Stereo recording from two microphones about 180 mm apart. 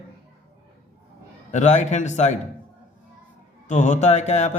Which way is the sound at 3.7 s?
45° left (ahead or behind).